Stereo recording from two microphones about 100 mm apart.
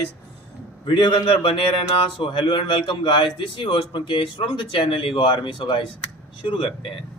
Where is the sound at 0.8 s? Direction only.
50° left (ahead or behind).